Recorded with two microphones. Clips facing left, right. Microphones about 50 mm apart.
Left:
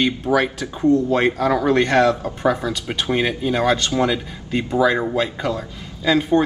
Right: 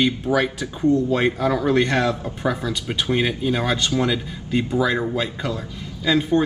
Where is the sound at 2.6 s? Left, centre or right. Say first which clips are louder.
Left 1 dB; centre.